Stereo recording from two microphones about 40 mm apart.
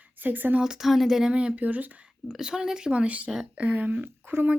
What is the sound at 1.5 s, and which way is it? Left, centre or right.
Speech, right.